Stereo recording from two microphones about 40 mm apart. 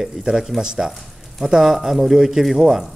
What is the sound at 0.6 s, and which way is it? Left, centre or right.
Speech, centre.